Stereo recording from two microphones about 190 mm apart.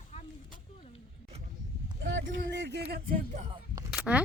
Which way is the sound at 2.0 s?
75° right (ahead or behind).